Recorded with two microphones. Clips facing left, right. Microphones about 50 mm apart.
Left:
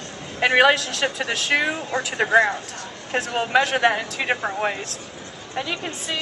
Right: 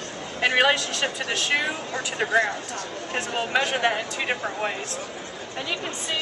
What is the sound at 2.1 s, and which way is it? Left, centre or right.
Speech, centre.